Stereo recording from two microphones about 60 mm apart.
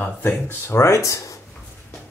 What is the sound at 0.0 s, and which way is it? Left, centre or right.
Speech, left.